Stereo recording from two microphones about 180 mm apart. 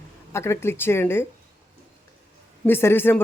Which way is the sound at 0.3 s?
15° left (ahead or behind).